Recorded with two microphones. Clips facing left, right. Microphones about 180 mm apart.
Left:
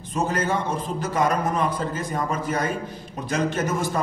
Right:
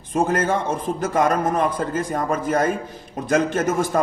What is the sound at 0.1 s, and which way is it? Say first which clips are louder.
A man's voice: right 4 dB; 50° right (ahead or behind).